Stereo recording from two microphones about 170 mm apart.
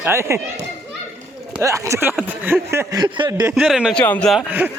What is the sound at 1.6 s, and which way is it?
Chuckle, 20° right (ahead or behind).